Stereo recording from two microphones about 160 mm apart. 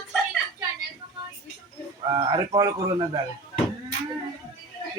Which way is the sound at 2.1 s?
30° right (ahead or behind).